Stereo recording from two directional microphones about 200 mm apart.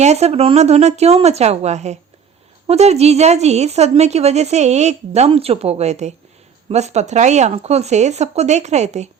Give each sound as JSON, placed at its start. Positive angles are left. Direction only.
{"t": 0.0, "sound": "a woman's voice", "side_deg": -30}